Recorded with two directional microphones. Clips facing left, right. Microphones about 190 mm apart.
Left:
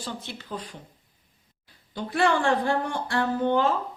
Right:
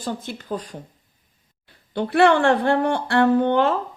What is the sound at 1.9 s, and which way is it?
A woman's voice, 65° right (ahead or behind).